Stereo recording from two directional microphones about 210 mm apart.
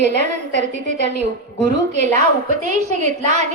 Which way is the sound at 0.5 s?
35° right (ahead or behind).